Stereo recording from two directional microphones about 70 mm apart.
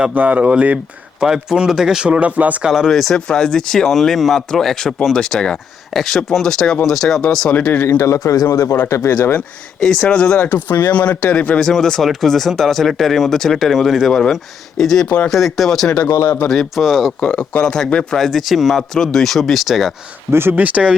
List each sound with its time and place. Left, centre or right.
0.1 s speech: right
1.2 s speech: centre
2.1 s speech: right
2.6 s speech: centre
2.9 s speech: centre
7.5 s speech: left
7.9 s speech: left
9.8 s speech: centre
10.4 s speech: left; by 17.2 s centre
17.2 s speech: centre
20.3 s speech: right